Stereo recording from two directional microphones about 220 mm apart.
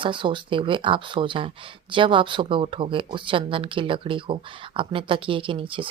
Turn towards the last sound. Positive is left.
turn(degrees=-25)  # may be behind; listen again after turning